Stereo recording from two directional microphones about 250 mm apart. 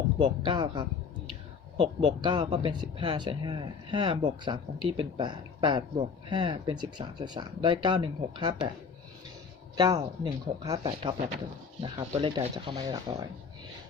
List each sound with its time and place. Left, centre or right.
0.2 s speech: centre
9.7 s speech: centre